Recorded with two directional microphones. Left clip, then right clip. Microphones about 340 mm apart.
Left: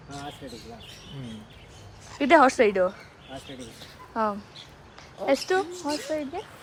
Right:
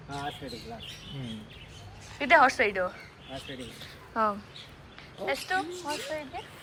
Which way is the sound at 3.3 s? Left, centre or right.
Centre.